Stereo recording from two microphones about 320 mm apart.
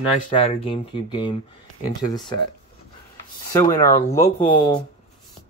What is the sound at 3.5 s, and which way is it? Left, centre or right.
Speech, centre.